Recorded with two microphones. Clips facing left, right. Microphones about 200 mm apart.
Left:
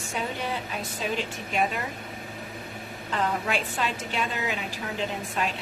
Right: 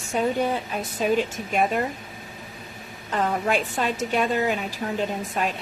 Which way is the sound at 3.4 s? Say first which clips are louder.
Right 5 dB; 50° right (ahead or behind).